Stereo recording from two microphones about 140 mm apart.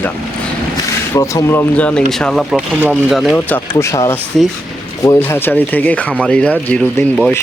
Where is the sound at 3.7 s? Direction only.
25° left (ahead or behind); by 7.3 s 5° left (ahead or behind).